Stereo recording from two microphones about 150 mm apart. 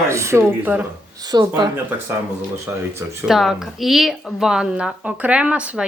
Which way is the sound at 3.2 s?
Centre (ahead or behind).